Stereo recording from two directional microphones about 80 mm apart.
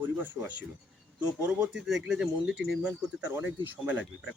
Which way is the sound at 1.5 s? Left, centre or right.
Centre.